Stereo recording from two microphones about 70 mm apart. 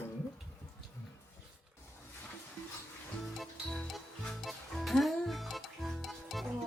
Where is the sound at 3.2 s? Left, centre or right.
Centre.